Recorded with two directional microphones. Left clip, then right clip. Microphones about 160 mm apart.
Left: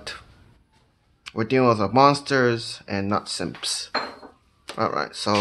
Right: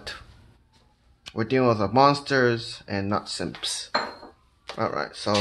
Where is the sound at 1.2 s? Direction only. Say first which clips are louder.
Left 2 dB; 15° left (ahead or behind).